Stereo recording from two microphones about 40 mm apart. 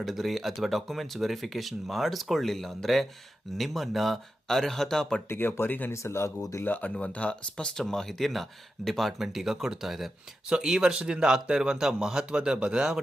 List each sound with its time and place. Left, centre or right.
0.0 s speech: centre
5.3 s speech: left
7.0 s speech: left
7.5 s speech: centre
8.3 s speech: centre
9.1 s speech: centre
10.5 s speech: centre